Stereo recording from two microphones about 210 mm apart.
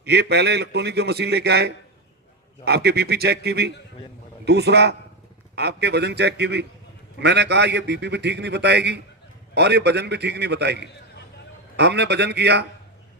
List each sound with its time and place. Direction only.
0.0 s a man's voice: 50° right (ahead or behind)